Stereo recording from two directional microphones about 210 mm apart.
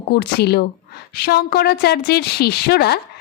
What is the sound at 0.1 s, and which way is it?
A woman's voice, 50° left (ahead or behind).